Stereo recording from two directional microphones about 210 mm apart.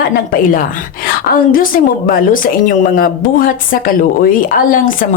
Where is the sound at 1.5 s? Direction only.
40° left (ahead or behind).